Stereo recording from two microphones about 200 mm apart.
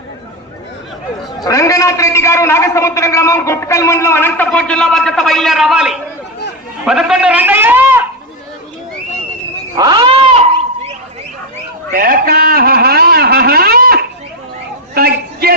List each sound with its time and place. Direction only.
1.4 s a man's voice: 15° left (ahead or behind); by 8.0 s 10° right (ahead or behind)
9.7 s cat: 20° right (ahead or behind)
11.9 s a sound: 50° right (ahead or behind)